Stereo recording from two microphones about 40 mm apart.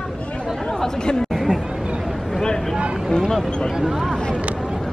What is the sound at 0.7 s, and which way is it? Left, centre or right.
Chatter, centre.